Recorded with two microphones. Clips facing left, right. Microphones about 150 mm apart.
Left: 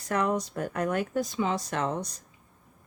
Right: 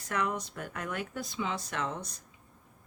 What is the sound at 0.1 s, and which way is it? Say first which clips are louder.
Speech: left 6 dB; 35° left (ahead or behind).